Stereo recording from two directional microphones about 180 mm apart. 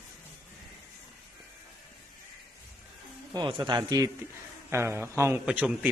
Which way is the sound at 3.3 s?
25° right (ahead or behind).